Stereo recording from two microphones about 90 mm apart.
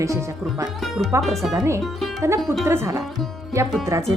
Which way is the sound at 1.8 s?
Centre (ahead or behind).